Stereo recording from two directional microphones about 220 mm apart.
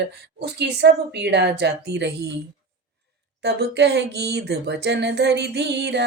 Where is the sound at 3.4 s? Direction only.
50° right (ahead or behind).